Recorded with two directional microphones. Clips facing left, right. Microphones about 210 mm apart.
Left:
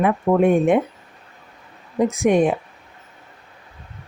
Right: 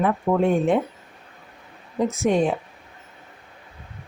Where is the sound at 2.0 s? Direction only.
15° left (ahead or behind).